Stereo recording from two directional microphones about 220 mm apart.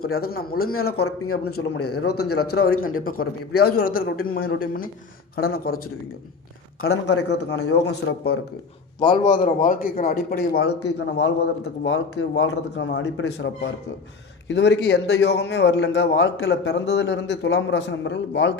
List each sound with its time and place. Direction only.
0.2 s a man's voice: 45° left (ahead or behind)
0.7 s a man's voice: 75° left (ahead or behind); by 2.3 s 90° left
2.6 s a man's voice: 70° left (ahead or behind)
3.0 s a man's voice: 40° left (ahead or behind)
6.8 s a man's voice: 60° left (ahead or behind)
9.0 s a man's voice: 20° left (ahead or behind)
9.4 s a man's voice: 40° left (ahead or behind)